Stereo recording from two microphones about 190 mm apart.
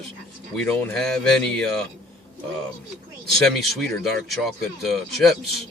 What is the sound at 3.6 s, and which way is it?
Speech, centre (ahead or behind).